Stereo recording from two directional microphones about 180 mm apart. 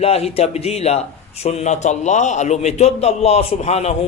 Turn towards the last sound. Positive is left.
turn(degrees=40)  # may be behind; listen again after turning